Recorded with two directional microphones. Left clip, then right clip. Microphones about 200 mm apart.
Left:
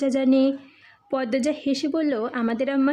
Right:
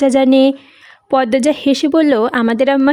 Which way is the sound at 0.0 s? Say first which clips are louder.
Right 10 dB; 40° right (ahead or behind).